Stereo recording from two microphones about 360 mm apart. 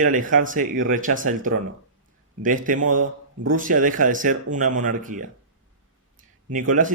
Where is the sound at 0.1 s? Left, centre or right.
Right.